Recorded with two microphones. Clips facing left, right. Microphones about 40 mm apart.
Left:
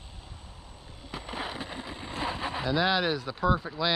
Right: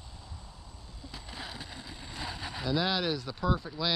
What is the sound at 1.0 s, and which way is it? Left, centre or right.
Speech, left.